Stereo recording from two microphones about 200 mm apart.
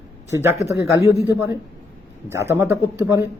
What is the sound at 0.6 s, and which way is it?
Speech, 15° right (ahead or behind).